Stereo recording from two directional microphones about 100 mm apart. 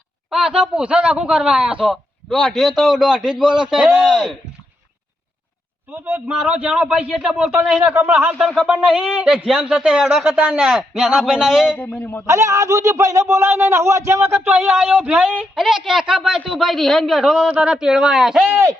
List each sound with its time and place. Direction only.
0.3 s a man's voice: 5° right (ahead or behind)
5.9 s a man's voice: 20° right (ahead or behind)
8.4 s a man's voice: 5° right (ahead or behind)
11.8 s speech: 20° left (ahead or behind)
12.2 s a man's voice: 30° right (ahead or behind)
14.7 s a man's voice: 5° right (ahead or behind)